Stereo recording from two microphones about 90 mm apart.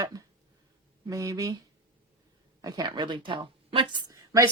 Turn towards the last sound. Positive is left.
turn(degrees=-35)  # may be behind; listen again after turning